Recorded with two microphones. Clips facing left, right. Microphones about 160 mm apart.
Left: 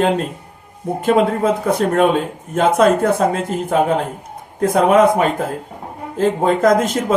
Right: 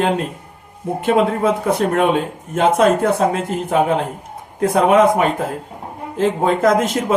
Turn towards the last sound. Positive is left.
turn(degrees=45)  # may be behind; listen again after turning